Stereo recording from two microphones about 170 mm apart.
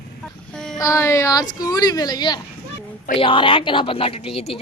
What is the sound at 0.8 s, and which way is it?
Speech, 20° left (ahead or behind).